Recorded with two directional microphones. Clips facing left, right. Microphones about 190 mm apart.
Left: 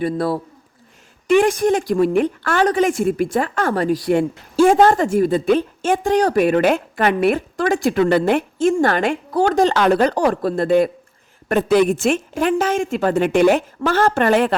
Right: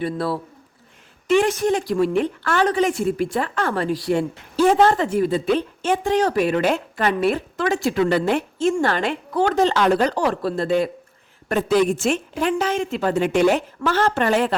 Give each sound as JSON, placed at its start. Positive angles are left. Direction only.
{"t": 0.0, "sound": "a woman's voice", "side_deg": 45}